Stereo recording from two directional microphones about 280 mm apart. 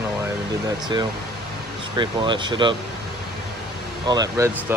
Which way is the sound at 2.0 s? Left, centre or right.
Centre.